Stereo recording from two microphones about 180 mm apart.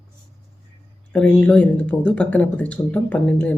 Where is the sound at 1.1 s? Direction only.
5° left (ahead or behind).